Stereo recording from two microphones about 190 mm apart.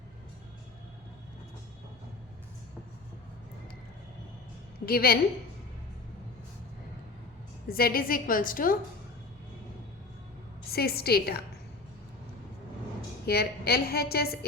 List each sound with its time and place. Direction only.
4.9 s a woman's voice: 50° left (ahead or behind)
7.7 s a woman's voice: 50° left (ahead or behind)
10.7 s a woman's voice: 55° left (ahead or behind)
13.2 s a woman's voice: 55° left (ahead or behind)